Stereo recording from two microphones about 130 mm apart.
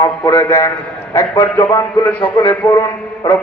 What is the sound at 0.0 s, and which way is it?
Mantra, 25° left (ahead or behind).